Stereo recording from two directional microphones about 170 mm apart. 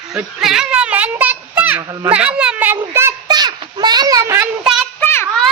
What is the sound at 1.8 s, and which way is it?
Speech, 20° right (ahead or behind).